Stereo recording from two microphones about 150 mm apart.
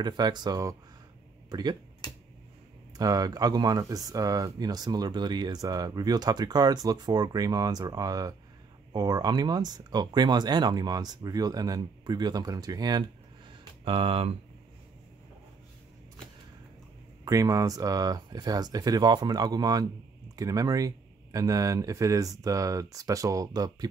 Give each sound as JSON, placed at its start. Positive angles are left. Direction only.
{"t": 0.0, "sound": "speech", "side_deg": -30}
{"t": 2.0, "sound": "finger snapping", "side_deg": 25}
{"t": 3.0, "sound": "speech", "side_deg": -25}
{"t": 17.2, "sound": "speech", "side_deg": -20}